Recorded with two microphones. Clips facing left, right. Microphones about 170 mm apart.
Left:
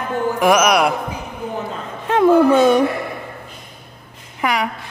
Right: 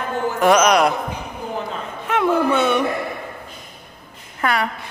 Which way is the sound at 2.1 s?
35° left (ahead or behind).